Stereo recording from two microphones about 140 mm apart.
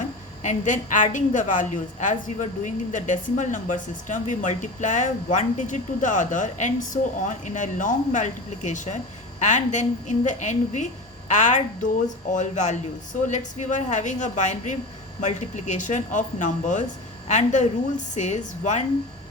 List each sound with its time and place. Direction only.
0.0 s a woman's voice: 60° left (ahead or behind)